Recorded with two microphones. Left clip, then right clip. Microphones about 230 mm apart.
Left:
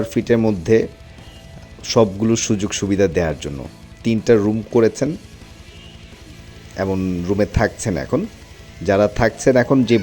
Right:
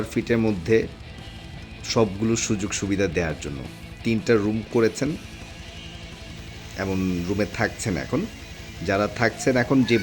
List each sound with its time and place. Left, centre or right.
0.0 s a man's voice: left
6.7 s a man's voice: centre